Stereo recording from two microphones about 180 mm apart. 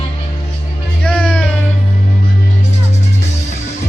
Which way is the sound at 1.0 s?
5° left (ahead or behind).